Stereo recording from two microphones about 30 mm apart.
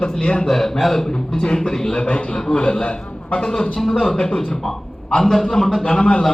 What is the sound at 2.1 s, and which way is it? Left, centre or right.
Speech, left.